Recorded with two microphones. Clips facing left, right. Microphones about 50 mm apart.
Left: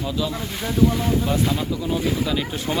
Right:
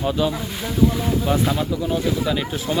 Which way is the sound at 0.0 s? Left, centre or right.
Right.